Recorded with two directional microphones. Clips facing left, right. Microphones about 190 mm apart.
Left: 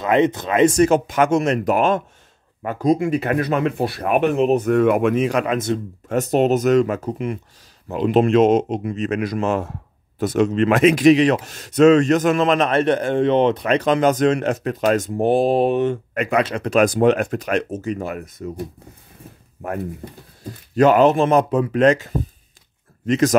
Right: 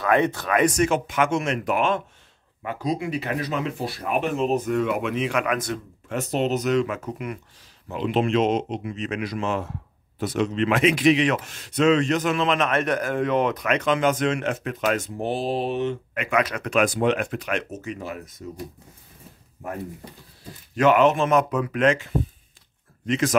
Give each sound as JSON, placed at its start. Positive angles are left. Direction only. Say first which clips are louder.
{"t": 0.0, "sound": "speech", "louder": "left 4 dB", "side_deg": 20}
{"t": 6.0, "sound": "speech", "louder": "left 7 dB", "side_deg": 45}
{"t": 7.9, "sound": "speech", "louder": "left 6 dB", "side_deg": 45}
{"t": 17.9, "sound": "speech", "louder": "left 6 dB", "side_deg": 55}
{"t": 20.7, "sound": "speech", "louder": "left 4 dB", "side_deg": 35}